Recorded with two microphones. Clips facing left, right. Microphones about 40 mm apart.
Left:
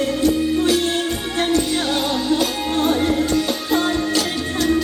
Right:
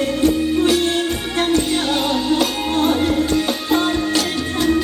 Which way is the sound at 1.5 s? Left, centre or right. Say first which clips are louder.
Right 1 dB; centre.